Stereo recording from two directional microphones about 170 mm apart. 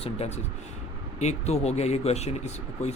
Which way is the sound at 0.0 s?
40° left (ahead or behind).